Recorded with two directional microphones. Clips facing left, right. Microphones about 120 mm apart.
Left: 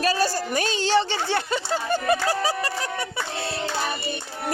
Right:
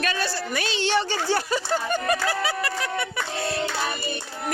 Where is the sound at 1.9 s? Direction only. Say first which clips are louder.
Left 5 dB; 30° left (ahead or behind).